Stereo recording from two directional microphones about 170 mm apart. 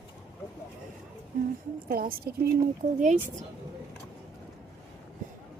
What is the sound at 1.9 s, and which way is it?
Speech, 60° right (ahead or behind).